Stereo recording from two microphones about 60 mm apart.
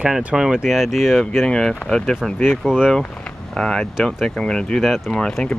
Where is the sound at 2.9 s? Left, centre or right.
Centre.